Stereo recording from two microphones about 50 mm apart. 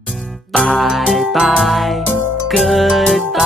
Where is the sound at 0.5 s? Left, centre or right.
Centre.